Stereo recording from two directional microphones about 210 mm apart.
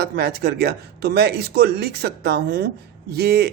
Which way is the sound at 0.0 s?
50° right (ahead or behind).